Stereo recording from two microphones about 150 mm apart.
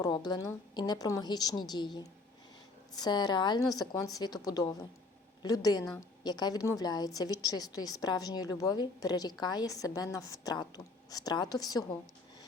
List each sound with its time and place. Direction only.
0.0 s a woman's voice: 30° left (ahead or behind)